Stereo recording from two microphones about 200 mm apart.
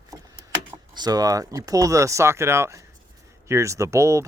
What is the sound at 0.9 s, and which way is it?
Speech, 20° right (ahead or behind).